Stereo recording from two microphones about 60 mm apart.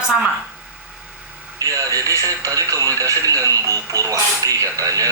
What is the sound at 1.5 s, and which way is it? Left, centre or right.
Speech, right.